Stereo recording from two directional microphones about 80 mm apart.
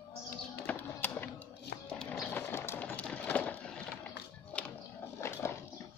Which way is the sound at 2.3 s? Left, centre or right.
Left.